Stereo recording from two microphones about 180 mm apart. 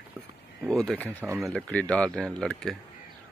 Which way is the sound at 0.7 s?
5° left (ahead or behind).